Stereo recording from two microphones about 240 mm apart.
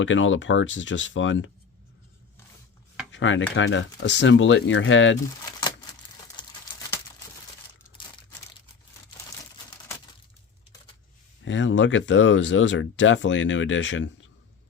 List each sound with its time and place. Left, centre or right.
0.0 s speech: left
3.1 s cutlery: left
3.5 s speech: left
6.4 s a sound: centre
11.4 s speech: left